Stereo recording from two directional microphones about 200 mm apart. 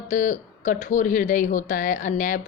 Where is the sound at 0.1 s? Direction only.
40° left (ahead or behind).